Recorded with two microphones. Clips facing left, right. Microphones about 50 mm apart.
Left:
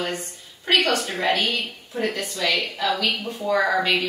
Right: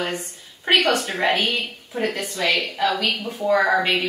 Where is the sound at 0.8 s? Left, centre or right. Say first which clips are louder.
Right 2 dB; right.